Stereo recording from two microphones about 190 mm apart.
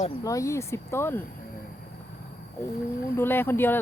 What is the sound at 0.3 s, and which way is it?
Speech, 15° left (ahead or behind).